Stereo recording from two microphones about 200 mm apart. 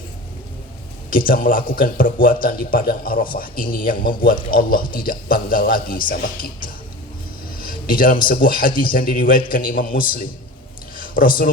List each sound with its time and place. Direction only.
1.1 s a man's voice: 45° left (ahead or behind)
7.6 s a man's voice: 45° left (ahead or behind)
10.9 s a sound: 45° left (ahead or behind)